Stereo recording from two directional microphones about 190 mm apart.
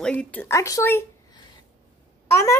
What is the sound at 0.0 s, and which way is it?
Speech, 5° left (ahead or behind).